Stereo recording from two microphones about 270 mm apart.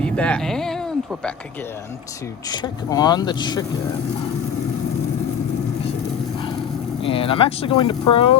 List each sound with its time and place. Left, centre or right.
0.0 s a sound: centre
2.5 s speech: centre
7.0 s speech: centre